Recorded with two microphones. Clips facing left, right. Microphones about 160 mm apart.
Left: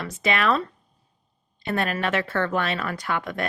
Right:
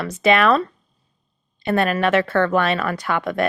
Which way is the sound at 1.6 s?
65° right (ahead or behind).